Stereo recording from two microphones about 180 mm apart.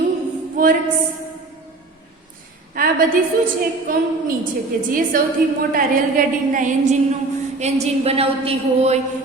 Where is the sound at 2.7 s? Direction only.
55° right (ahead or behind).